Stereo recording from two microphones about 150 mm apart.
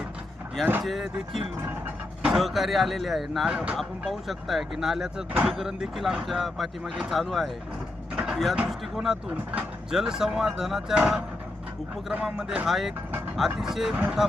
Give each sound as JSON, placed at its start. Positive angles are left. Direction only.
{"t": 0.6, "sound": "speech", "side_deg": -5}